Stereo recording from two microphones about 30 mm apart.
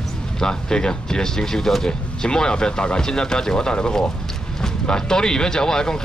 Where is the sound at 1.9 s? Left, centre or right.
Left.